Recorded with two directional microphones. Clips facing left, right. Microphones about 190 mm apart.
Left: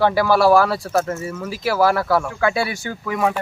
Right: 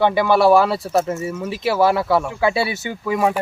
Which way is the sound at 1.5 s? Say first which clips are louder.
Right 1 dB; 25° right (ahead or behind).